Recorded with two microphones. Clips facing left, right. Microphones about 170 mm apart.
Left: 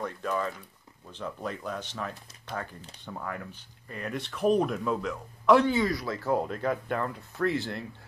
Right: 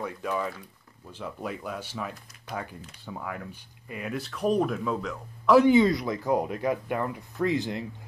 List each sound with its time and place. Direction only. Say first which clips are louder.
0.0 s speech: even; 10° right (ahead or behind)
5.7 s speech: right 7 dB; 20° right (ahead or behind)